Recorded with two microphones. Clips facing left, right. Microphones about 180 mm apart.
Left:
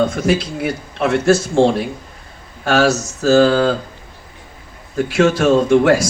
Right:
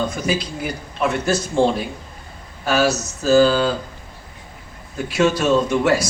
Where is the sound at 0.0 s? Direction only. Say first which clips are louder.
Left 6 dB; 80° left.